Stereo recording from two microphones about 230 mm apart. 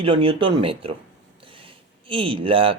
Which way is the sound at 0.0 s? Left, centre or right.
Right.